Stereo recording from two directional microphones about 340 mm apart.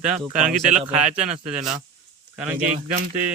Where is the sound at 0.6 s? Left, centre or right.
Centre.